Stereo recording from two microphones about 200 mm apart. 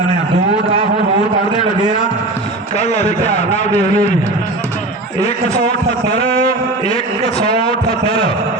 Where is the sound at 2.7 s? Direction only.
35° left (ahead or behind).